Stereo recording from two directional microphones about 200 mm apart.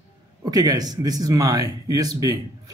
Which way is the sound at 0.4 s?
20° right (ahead or behind).